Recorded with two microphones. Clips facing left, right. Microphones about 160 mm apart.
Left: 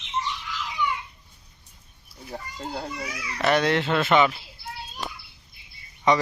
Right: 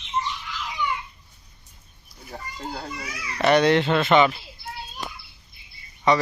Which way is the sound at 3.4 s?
Centre (ahead or behind).